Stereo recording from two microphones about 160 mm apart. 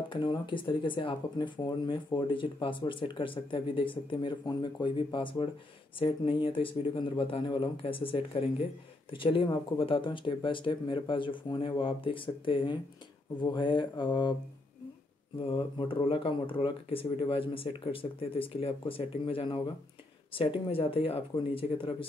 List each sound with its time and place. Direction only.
0.1 s speech: 30° left (ahead or behind)
15.4 s speech: 35° left (ahead or behind)